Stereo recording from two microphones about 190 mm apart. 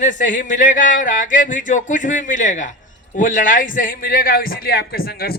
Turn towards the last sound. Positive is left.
turn(degrees=55)  # may be behind; listen again after turning